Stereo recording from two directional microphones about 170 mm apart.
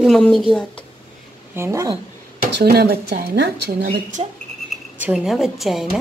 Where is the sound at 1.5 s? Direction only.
15° right (ahead or behind).